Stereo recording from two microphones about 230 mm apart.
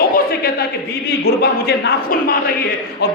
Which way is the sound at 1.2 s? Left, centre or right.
Left.